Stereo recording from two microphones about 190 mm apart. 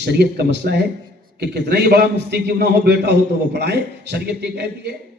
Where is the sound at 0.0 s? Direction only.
60° right (ahead or behind).